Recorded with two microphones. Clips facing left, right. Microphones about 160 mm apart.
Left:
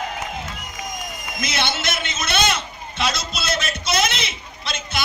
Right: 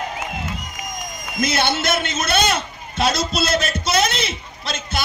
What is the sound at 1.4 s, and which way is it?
A man's voice, 35° right (ahead or behind).